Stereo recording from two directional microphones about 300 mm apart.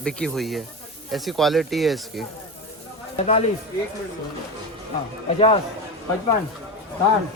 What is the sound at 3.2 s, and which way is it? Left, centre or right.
Speech, left.